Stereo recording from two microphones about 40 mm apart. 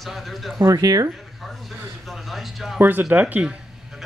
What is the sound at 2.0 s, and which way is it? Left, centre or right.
Speech, centre.